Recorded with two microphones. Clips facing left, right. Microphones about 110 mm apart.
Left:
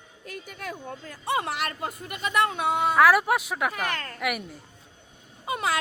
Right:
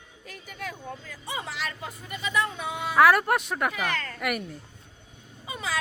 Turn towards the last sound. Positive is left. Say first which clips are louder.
# left 7 dB
turn(degrees=65)  # may be behind; listen again after turning